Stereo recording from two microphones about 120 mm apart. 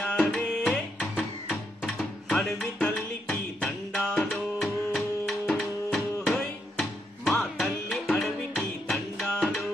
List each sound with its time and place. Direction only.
0.0 s tabla: 10° left (ahead or behind)
4.2 s music: centre (ahead or behind)
8.8 s tabla: 5° left (ahead or behind)